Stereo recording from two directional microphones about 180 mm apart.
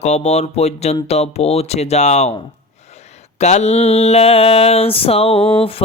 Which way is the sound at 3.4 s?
40° left (ahead or behind).